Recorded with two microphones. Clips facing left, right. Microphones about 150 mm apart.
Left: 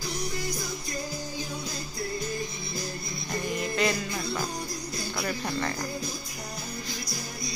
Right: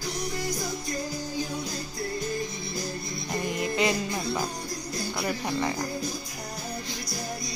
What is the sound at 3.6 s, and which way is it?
Music, 15° right (ahead or behind).